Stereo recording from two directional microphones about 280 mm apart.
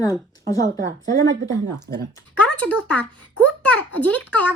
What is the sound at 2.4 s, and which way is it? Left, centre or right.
A child's voice, centre.